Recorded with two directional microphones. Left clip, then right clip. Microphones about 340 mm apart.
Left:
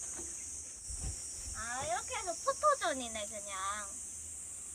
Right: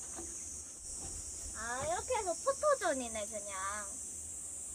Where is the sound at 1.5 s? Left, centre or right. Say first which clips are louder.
Even; centre.